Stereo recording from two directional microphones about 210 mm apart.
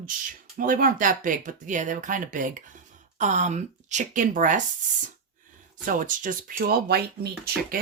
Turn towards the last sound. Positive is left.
turn(degrees=-45)  # may be behind; listen again after turning